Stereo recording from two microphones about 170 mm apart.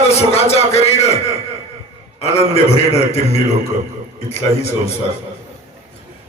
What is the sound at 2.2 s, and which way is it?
Speech, 35° left (ahead or behind).